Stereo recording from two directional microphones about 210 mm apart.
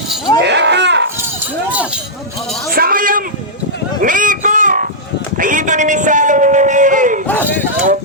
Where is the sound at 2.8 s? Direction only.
45° right (ahead or behind).